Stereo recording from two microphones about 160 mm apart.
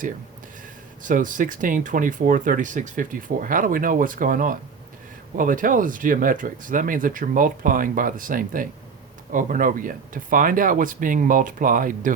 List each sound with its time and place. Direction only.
1.0 s speech: 55° right (ahead or behind)